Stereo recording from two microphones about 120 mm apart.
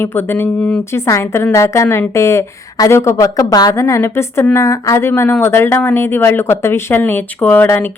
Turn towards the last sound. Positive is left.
turn(degrees=15)  # may be behind; listen again after turning